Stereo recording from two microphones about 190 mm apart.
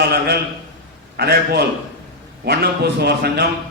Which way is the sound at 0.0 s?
55° right (ahead or behind).